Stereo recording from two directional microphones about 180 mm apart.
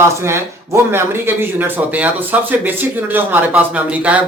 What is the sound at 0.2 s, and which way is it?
Speech, 15° right (ahead or behind).